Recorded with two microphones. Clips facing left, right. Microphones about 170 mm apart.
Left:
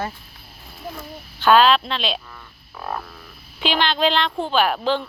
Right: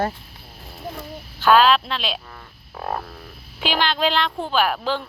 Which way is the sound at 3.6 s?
5° right (ahead or behind).